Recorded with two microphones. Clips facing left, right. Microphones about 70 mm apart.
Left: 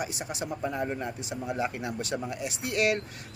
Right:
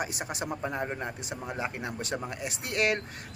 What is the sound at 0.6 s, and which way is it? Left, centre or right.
Speech, right.